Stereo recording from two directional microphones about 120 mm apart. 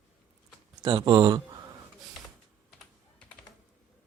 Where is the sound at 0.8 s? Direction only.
40° right (ahead or behind).